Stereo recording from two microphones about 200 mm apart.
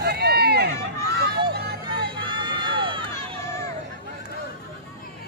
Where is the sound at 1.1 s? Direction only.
55° right (ahead or behind).